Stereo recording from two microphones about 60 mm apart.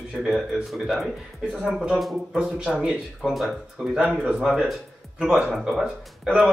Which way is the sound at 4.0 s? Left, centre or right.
Centre.